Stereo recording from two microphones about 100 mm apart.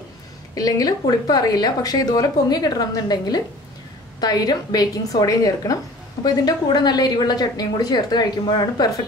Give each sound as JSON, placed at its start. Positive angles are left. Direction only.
{"t": 0.6, "sound": "a woman's voice", "side_deg": 35}